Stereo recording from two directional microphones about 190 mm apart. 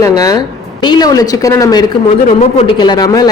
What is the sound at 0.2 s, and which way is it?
A woman's voice, 20° left (ahead or behind).